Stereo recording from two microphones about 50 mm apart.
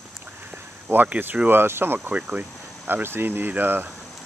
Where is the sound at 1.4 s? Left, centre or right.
Right.